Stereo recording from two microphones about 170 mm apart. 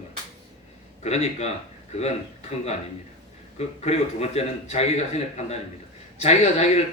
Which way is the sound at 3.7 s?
40° left (ahead or behind).